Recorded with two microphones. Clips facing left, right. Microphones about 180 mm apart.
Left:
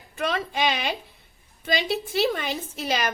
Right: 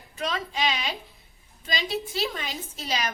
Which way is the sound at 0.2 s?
55° left (ahead or behind).